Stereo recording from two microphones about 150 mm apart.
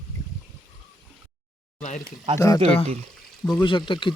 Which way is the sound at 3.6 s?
35° left (ahead or behind).